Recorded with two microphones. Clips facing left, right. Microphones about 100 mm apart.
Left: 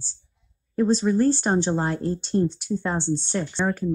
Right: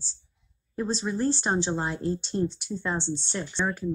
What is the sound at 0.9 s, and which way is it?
Speech, 45° left (ahead or behind).